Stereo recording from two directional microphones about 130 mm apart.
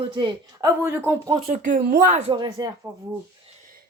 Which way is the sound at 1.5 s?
80° right.